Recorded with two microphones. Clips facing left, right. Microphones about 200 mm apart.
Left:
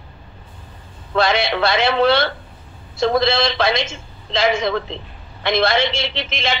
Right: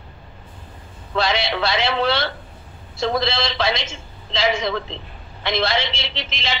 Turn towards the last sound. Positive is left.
turn(degrees=55)  # may be behind; listen again after turning